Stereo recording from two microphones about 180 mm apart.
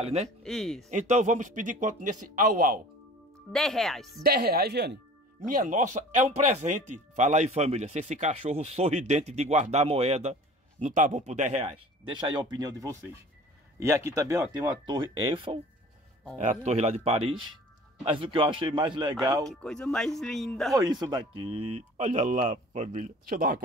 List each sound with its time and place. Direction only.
0.0 s speech: 35° right (ahead or behind)
0.4 s speech: 5° left (ahead or behind)
0.8 s a man's voice: 40° right (ahead or behind)
3.5 s speech: centre (ahead or behind)
4.2 s speech: 60° right (ahead or behind)
5.5 s speech: 45° right (ahead or behind)
12.1 s a man's voice: 25° right (ahead or behind)
19.4 s speech: 5° left (ahead or behind)
20.7 s speech: 20° right (ahead or behind); by 23.6 s 50° right (ahead or behind)